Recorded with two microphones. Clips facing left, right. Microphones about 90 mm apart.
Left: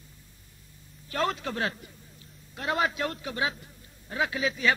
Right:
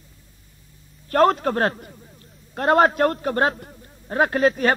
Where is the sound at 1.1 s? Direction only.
45° right (ahead or behind).